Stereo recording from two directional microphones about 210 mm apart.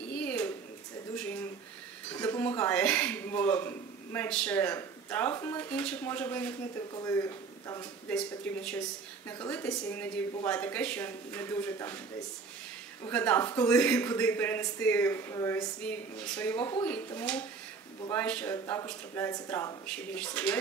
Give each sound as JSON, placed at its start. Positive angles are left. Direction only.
{"t": 0.1, "sound": "a sound", "side_deg": 5}
{"t": 6.9, "sound": "speech", "side_deg": 15}
{"t": 8.1, "sound": "a man's voice", "side_deg": 5}
{"t": 13.1, "sound": "a man's voice", "side_deg": 5}